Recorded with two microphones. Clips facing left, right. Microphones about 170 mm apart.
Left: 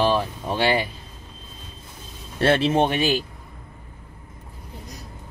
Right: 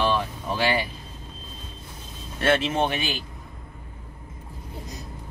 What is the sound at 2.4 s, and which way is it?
Speech, 35° left (ahead or behind).